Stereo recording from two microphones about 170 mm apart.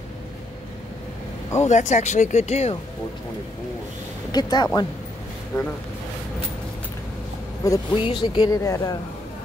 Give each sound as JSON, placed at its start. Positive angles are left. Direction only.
{"t": 1.6, "sound": "speech", "side_deg": 45}
{"t": 4.3, "sound": "speech", "side_deg": 25}
{"t": 7.6, "sound": "speech", "side_deg": 20}